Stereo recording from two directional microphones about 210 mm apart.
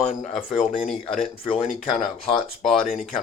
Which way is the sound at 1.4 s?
30° left (ahead or behind).